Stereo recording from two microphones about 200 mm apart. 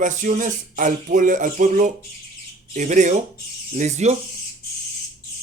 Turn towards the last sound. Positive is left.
turn(degrees=-35)  # may be behind; listen again after turning